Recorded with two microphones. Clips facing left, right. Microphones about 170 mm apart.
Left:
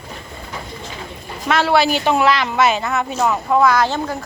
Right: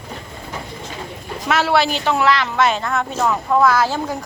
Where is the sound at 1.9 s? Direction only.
15° left (ahead or behind); by 4.2 s 10° right (ahead or behind).